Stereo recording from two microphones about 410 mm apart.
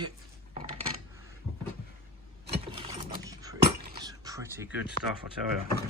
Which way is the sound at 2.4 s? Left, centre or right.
Centre.